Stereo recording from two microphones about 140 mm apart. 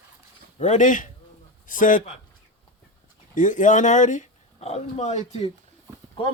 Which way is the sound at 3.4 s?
65° left (ahead or behind).